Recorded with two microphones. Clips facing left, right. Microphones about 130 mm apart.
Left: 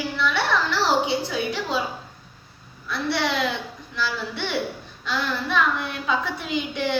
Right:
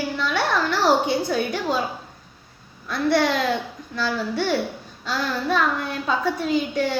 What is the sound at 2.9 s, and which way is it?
A woman's voice, 45° right (ahead or behind).